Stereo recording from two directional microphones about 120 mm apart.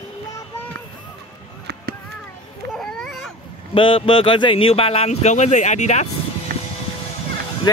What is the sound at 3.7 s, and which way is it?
A man's voice, 45° left (ahead or behind).